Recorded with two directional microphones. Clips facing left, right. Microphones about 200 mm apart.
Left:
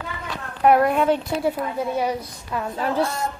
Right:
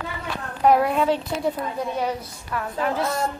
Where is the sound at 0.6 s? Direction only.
Centre (ahead or behind); by 2.7 s 20° left (ahead or behind).